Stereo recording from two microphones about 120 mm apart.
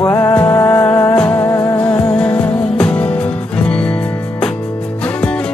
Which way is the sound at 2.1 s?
10° left (ahead or behind).